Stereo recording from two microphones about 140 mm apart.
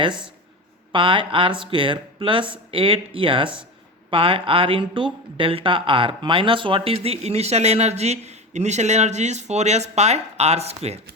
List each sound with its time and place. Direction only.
0.0 s speech: 35° right (ahead or behind)